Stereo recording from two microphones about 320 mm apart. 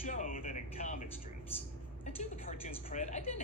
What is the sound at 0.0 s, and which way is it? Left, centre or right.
Speech, left.